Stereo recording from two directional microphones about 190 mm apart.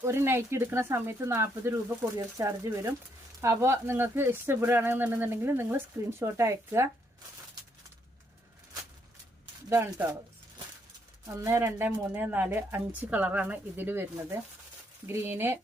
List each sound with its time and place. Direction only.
0.0 s speech: 15° right (ahead or behind)
9.6 s speech: 10° right (ahead or behind)
11.3 s speech: 15° right (ahead or behind)